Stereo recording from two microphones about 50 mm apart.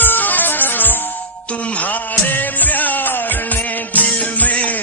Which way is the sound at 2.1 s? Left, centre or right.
Left.